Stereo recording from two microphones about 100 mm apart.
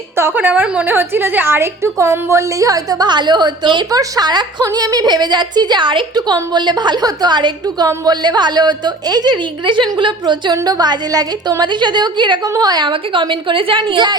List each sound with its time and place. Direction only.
0.2 s a woman's voice: 20° right (ahead or behind); by 10.5 s 50° right (ahead or behind)
10.5 s a woman's voice: 40° right (ahead or behind)